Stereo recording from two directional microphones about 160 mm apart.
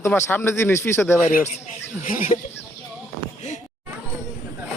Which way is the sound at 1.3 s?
60° left (ahead or behind).